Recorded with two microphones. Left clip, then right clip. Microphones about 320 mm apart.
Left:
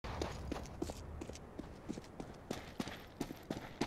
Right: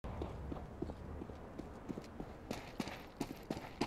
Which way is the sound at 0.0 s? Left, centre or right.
Left.